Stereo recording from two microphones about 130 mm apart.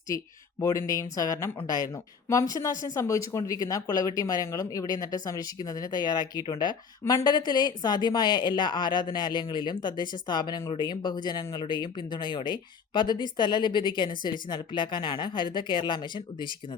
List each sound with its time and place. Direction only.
0.6 s speech: 25° left (ahead or behind)
7.0 s speech: 20° left (ahead or behind)
7.3 s speech: 35° left (ahead or behind)